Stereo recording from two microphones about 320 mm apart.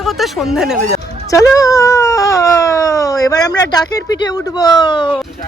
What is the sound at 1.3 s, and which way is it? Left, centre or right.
Speech, centre.